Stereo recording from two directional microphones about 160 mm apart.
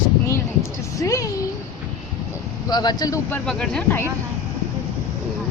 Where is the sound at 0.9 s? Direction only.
20° left (ahead or behind).